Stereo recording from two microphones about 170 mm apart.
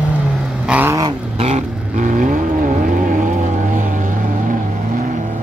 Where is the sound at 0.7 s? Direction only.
10° right (ahead or behind).